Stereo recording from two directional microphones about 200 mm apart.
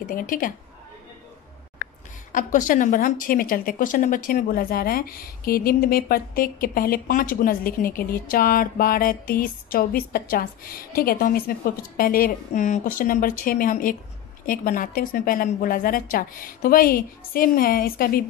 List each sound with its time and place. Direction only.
0.1 s speech: 45° left (ahead or behind)
2.3 s speech: 40° left (ahead or behind)